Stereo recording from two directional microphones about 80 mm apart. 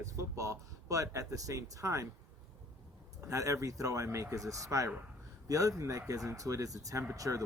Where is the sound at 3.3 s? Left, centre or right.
Right.